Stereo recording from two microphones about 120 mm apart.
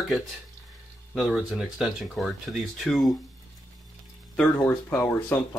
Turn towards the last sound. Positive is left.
turn(degrees=20)  # may be behind; listen again after turning